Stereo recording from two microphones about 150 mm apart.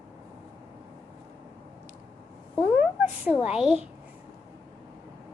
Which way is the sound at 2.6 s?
10° right (ahead or behind).